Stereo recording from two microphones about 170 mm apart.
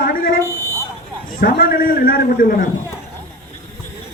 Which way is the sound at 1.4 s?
60° left (ahead or behind).